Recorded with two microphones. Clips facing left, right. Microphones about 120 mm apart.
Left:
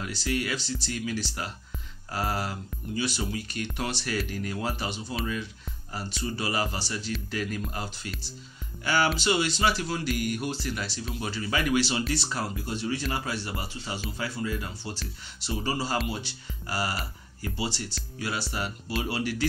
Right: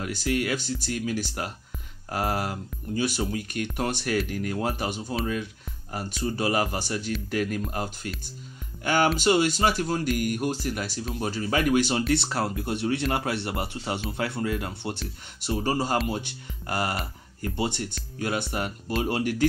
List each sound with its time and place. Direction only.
0.0 s speech: 50° right (ahead or behind)
12.1 s speech: 60° right (ahead or behind)